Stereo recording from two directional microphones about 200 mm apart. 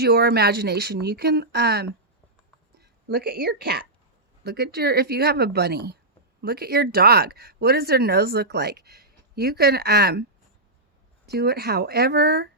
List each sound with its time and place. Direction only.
0.0 s a woman's voice: 55° right (ahead or behind)
11.3 s speech: 55° right (ahead or behind)